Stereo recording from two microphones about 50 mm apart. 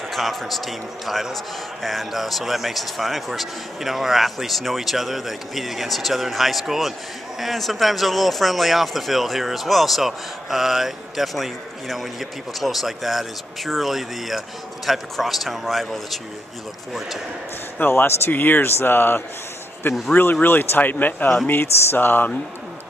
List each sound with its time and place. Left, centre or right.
0.1 s speech: centre
17.7 s speech: left
18.3 s speech: left
19.8 s speech: left
20.4 s speech: left